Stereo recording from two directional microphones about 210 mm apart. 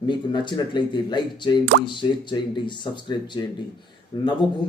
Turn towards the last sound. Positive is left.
turn(degrees=20)  # may be behind; listen again after turning